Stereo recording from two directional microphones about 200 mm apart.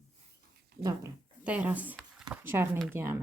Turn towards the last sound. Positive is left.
turn(degrees=-10)  # may be behind; listen again after turning